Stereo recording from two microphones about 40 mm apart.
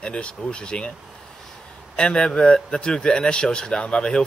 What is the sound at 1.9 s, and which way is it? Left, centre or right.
Speech, left.